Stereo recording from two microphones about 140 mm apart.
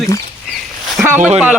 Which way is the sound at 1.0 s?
15° right (ahead or behind).